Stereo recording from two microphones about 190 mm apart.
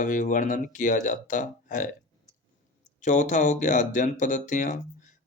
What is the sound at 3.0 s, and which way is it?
Speech, 40° left (ahead or behind).